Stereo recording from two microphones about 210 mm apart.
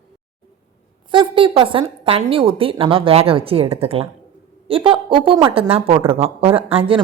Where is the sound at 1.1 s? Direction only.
25° right (ahead or behind).